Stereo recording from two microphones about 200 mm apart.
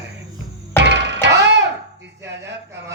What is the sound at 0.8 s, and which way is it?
Music, 60° right (ahead or behind).